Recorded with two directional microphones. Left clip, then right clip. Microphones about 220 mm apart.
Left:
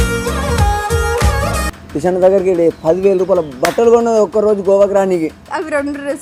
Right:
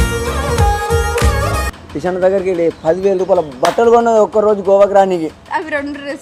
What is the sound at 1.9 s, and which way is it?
Speech, 25° left (ahead or behind).